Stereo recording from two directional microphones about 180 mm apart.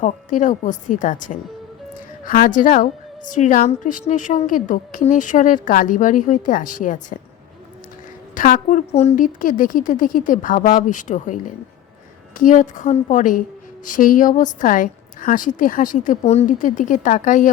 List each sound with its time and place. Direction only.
0.0 s a woman's voice: 45° left (ahead or behind)
8.4 s a woman's voice: 45° left (ahead or behind)